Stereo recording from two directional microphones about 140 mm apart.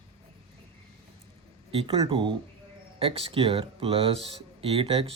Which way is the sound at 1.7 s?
45° right (ahead or behind).